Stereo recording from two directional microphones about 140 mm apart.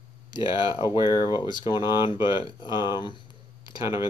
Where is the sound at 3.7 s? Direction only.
25° right (ahead or behind).